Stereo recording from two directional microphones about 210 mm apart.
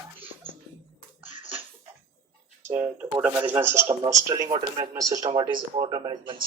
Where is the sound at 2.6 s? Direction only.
10° right (ahead or behind).